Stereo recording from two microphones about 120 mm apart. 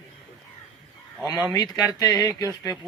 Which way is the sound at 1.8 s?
30° left (ahead or behind).